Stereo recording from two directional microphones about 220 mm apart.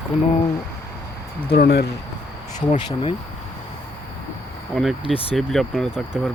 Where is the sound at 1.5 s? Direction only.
45° left (ahead or behind).